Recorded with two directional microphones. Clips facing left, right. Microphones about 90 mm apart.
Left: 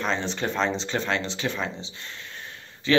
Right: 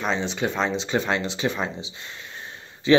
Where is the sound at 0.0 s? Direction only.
5° right (ahead or behind).